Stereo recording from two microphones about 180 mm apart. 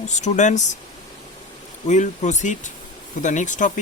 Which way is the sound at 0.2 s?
40° left (ahead or behind).